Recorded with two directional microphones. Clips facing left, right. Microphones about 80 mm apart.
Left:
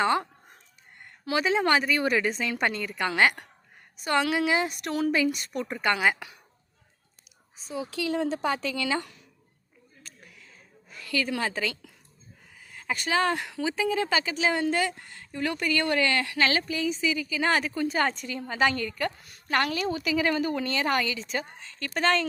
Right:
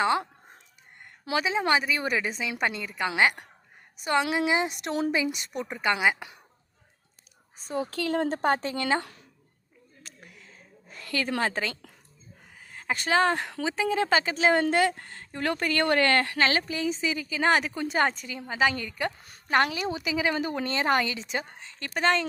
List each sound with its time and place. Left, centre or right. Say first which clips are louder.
0.0 s speech: even; centre
1.5 s a woman's voice: left 2 dB; centre; by 5.1 s right
5.1 s a woman's voice: left 2 dB; centre
7.5 s speech: right 3 dB; right
10.0 s a sound: right 2 dB; right
11.0 s a woman's voice: right 1 dB; right
18.1 s a woman's voice: left 2 dB; centre
20.3 s a woman's voice: left 1 dB; right